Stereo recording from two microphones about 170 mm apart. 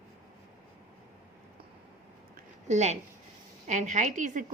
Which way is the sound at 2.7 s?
40° right (ahead or behind).